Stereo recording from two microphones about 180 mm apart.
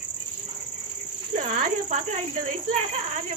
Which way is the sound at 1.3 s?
45° right (ahead or behind).